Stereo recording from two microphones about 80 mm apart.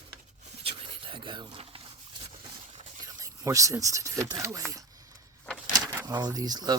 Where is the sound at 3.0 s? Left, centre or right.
Right.